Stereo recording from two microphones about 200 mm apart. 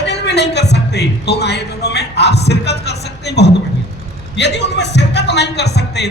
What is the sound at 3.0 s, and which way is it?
A man's voice, 55° left (ahead or behind).